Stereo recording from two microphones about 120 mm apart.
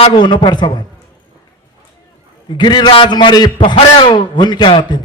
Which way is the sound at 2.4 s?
40° left (ahead or behind).